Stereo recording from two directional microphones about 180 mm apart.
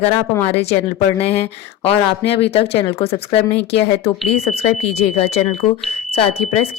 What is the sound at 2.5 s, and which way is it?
Speech, 35° left (ahead or behind).